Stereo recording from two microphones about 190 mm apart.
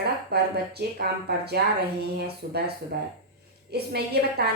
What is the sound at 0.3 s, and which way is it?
Speech, 55° right (ahead or behind).